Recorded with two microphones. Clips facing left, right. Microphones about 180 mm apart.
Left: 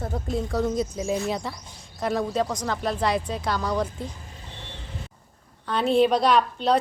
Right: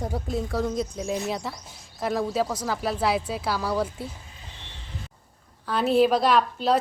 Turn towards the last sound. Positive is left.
turn(degrees=-5)  # may be behind; listen again after turning